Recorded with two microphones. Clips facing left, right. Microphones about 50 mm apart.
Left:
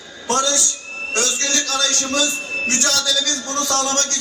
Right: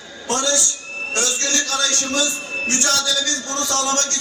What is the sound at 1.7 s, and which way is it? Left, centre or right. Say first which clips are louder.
Speech: left 1 dB; right.